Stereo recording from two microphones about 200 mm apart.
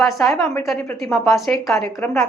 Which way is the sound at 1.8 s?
10° left (ahead or behind).